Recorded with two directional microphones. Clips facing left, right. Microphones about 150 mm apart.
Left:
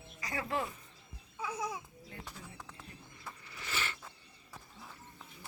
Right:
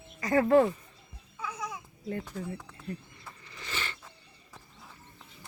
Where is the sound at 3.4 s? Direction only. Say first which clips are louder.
Right 2 dB; 10° left (ahead or behind).